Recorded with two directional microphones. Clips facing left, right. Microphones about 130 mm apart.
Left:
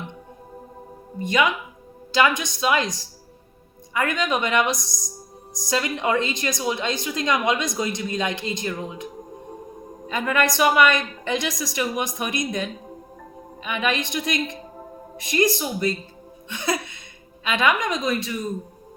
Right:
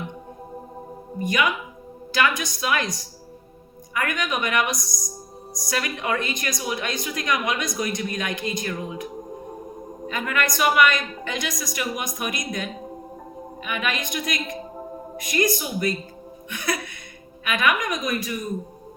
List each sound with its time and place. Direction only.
1.2 s a woman's voice: 25° left (ahead or behind)
3.9 s a woman's voice: 25° left (ahead or behind)
10.1 s a woman's voice: 30° left (ahead or behind)
13.7 s a woman's voice: 30° left (ahead or behind)